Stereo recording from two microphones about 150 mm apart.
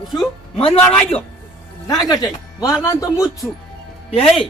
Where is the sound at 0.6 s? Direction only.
40° left (ahead or behind).